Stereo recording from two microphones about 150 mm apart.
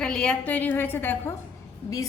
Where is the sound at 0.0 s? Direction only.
5° left (ahead or behind).